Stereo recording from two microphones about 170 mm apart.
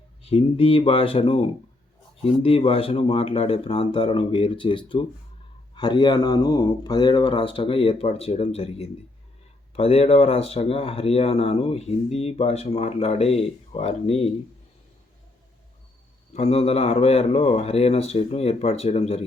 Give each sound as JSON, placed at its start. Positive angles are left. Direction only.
{"t": 0.2, "sound": "speech", "side_deg": 35}
{"t": 16.3, "sound": "speech", "side_deg": 40}